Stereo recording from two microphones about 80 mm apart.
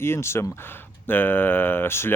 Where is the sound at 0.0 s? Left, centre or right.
Left.